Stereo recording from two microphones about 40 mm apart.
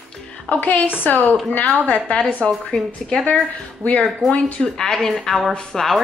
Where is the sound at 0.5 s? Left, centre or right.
Left.